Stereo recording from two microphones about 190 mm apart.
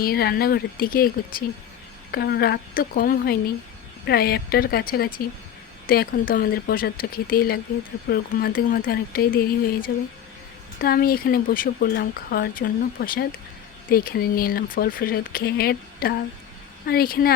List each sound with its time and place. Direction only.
0.0 s speech: 55° left (ahead or behind)